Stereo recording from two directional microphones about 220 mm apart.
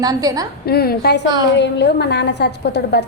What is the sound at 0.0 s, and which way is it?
Speech, 15° right (ahead or behind).